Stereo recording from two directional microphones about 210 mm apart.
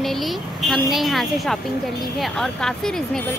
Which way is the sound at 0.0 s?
Centre (ahead or behind).